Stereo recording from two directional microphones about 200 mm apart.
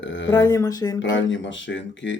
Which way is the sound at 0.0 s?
65° left (ahead or behind).